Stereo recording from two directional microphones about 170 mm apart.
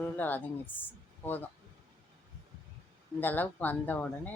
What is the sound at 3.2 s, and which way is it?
Speech, 10° left (ahead or behind).